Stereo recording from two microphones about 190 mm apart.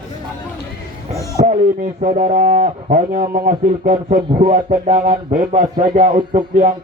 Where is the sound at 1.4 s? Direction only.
40° right (ahead or behind).